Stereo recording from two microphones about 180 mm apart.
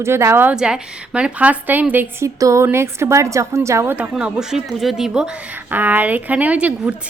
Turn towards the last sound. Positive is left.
turn(degrees=-5)  # may be behind; listen again after turning